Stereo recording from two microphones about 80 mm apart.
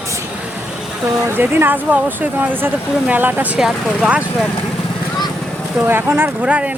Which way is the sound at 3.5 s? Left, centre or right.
Centre.